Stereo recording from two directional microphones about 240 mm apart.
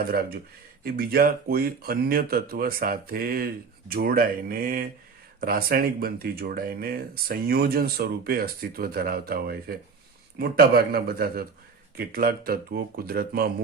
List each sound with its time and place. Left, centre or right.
0.0 s speech: right